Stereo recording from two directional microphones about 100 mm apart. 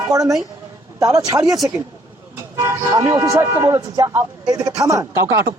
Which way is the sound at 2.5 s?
30° right (ahead or behind).